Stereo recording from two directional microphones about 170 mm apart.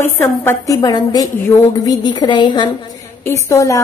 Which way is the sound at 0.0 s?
15° left (ahead or behind).